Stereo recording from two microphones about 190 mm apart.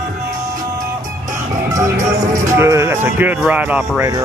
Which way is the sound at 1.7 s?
15° right (ahead or behind).